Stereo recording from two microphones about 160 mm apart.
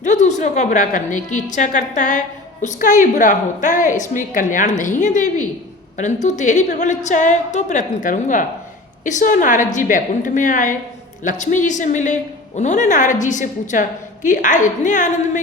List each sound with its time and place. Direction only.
0.0 s a woman's voice: 50° left (ahead or behind)